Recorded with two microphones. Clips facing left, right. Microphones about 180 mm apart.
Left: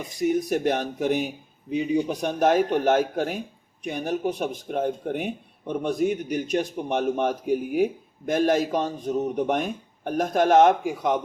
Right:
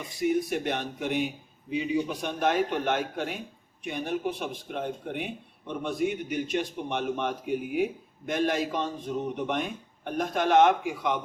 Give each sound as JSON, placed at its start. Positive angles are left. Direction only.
{"t": 0.2, "sound": "a man's voice", "side_deg": 45}